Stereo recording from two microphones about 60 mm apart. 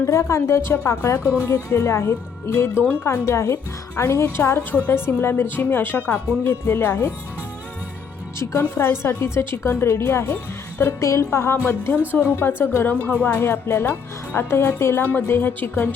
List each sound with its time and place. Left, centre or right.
0.0 s speech: left
1.2 s speech: left
8.4 s speech: left